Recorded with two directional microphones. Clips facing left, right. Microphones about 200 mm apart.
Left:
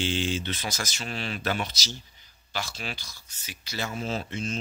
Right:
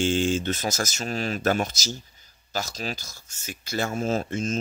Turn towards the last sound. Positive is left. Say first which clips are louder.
# right 6 dB
turn(degrees=-45)  # may be behind; listen again after turning